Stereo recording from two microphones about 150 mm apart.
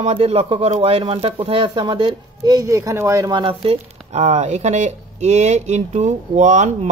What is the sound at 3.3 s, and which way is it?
A man's voice, 35° right (ahead or behind).